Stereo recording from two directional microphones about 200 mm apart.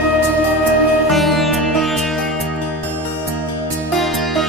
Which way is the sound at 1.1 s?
Centre (ahead or behind).